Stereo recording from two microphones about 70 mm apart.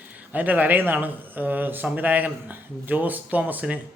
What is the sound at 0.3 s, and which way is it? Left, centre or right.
Speech, right.